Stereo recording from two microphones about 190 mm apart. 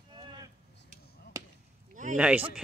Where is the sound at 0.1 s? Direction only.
25° right (ahead or behind).